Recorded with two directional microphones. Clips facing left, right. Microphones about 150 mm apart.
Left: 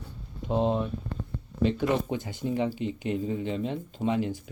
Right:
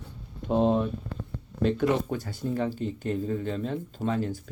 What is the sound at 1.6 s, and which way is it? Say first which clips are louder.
Speech: even; 5° left (ahead or behind).